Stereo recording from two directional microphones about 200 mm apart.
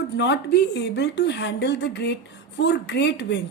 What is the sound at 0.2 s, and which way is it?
A woman's voice, 60° left (ahead or behind).